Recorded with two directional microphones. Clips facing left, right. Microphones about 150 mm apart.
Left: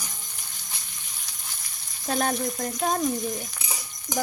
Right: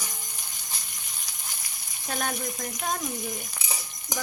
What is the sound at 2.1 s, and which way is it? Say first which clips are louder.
Speech: left 6 dB; 35° left (ahead or behind).